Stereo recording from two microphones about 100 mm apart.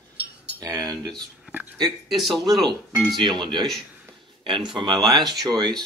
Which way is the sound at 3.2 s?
50° right (ahead or behind).